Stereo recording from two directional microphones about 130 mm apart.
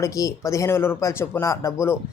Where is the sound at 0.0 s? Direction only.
25° left (ahead or behind).